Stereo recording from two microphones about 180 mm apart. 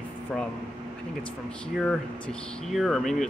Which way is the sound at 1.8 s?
5° left (ahead or behind).